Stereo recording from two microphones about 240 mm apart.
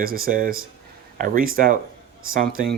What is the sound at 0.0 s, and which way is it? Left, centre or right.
Speech, right.